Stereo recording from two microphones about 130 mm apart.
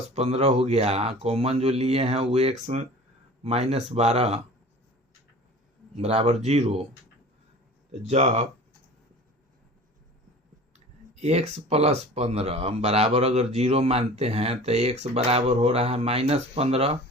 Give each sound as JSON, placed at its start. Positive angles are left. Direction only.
{"t": 0.1, "sound": "speech", "side_deg": -50}
{"t": 3.4, "sound": "speech", "side_deg": -55}
{"t": 6.0, "sound": "speech", "side_deg": -50}
{"t": 8.0, "sound": "speech", "side_deg": -60}
{"t": 11.1, "sound": "speech", "side_deg": -55}